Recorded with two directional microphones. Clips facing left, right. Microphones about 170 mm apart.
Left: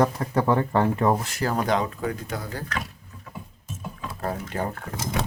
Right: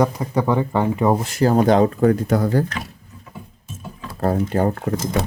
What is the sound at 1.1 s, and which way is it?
Speech, 20° right (ahead or behind).